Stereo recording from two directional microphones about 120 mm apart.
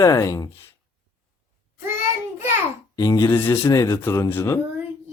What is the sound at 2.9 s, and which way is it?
Speech, 30° left (ahead or behind).